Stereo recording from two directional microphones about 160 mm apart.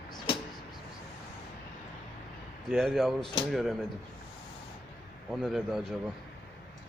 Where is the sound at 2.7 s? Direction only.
Centre (ahead or behind).